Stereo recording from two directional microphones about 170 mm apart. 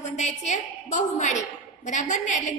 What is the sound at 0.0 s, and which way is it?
A woman's voice, 40° left (ahead or behind).